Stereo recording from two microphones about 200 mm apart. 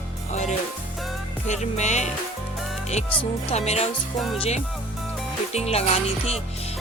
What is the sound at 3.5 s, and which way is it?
Music, 30° left (ahead or behind).